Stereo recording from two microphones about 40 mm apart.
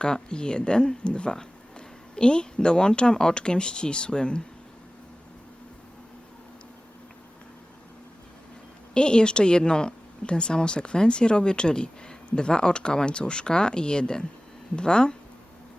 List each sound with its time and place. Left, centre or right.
0.0 s a woman's voice: left
9.0 s a woman's voice: left